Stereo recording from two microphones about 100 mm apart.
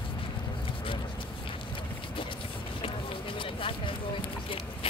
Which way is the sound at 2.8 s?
60° left (ahead or behind).